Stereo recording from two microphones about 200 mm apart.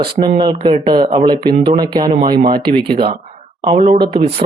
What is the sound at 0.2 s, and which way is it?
Speech, 25° right (ahead or behind).